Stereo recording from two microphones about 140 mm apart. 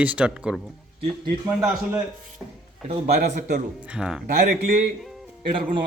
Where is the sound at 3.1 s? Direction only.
60° right (ahead or behind).